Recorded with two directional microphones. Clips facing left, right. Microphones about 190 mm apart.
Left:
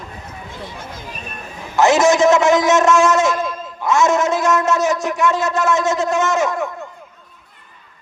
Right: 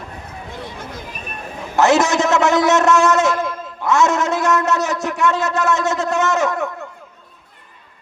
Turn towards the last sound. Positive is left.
turn(degrees=-60)  # may be behind; listen again after turning